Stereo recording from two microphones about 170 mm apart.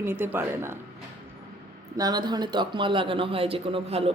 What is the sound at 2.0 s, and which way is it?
Speech, 25° right (ahead or behind).